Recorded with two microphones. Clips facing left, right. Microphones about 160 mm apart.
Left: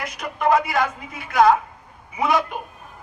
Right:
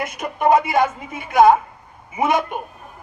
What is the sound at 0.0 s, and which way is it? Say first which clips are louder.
A man's voice: right 3 dB; 25° right (ahead or behind).